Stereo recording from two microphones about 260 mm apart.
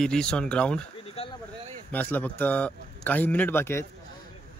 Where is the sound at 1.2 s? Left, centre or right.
Left.